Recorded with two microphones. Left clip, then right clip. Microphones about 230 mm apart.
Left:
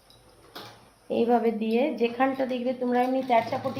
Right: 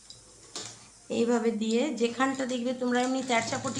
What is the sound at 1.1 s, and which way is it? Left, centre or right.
A woman's voice, centre.